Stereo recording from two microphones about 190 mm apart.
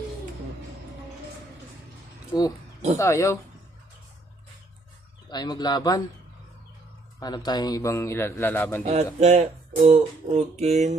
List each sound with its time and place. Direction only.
3.0 s a man's voice: 15° left (ahead or behind)
5.3 s speech: 20° left (ahead or behind)
7.2 s a man's voice: 20° left (ahead or behind)
8.8 s speech: 35° right (ahead or behind)